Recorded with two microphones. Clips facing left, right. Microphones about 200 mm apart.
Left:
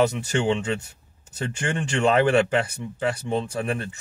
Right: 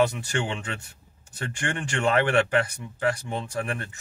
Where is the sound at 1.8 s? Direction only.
25° left (ahead or behind).